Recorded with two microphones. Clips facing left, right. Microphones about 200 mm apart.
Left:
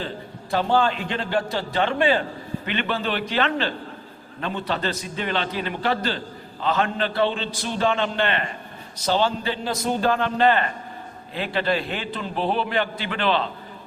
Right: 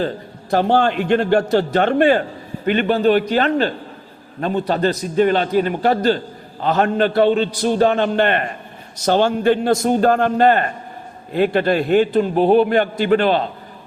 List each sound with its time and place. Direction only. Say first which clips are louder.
0.5 s a man's voice: right 5 dB; 55° right (ahead or behind)